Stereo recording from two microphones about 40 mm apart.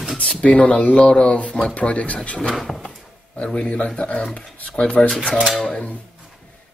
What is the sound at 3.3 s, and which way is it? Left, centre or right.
Speech, left.